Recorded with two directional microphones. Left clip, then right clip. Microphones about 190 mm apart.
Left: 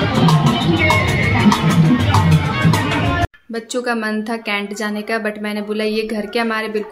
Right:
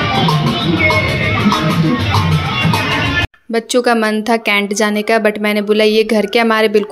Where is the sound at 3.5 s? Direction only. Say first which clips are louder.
Right 9 dB; 40° right (ahead or behind).